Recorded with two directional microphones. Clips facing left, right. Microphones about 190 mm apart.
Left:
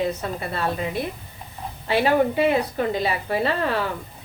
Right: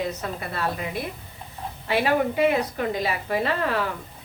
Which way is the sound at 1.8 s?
30° left (ahead or behind).